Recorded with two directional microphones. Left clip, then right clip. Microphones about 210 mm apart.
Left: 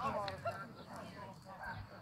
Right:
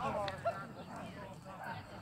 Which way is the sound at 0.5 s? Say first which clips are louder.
Right 4 dB; 20° left (ahead or behind).